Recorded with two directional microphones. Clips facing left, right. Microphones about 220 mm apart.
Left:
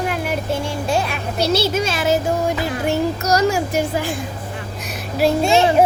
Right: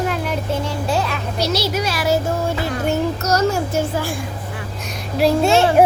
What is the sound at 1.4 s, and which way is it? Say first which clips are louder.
A child's voice: left 3 dB; 30° left (ahead or behind).